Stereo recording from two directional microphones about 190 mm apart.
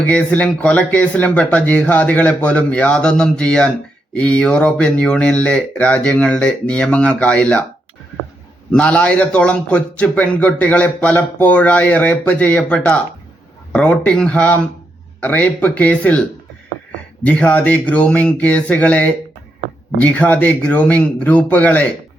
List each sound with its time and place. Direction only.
0.0 s a man's voice: 5° left (ahead or behind)
8.7 s a man's voice: 5° left (ahead or behind)
17.2 s a man's voice: 5° left (ahead or behind)